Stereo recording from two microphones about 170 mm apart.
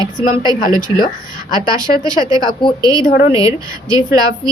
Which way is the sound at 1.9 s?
45° left (ahead or behind).